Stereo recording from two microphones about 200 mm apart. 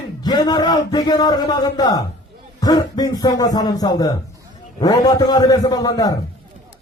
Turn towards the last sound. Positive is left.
turn(degrees=20)  # may be behind; listen again after turning